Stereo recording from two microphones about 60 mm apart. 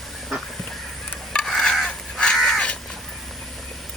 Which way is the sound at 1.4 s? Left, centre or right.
Centre.